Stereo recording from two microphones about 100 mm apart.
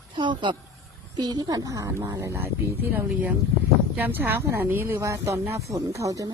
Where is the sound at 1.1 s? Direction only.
40° right (ahead or behind).